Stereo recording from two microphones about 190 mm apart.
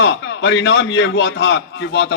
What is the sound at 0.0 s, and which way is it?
A man's voice, 75° left (ahead or behind).